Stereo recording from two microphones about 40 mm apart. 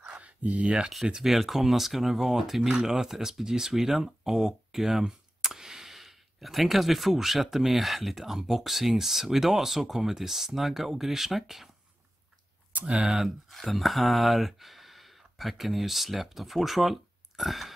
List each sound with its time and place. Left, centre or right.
0.0 s a sound: right
1.2 s speech: centre
12.8 s speech: right
13.5 s speech: centre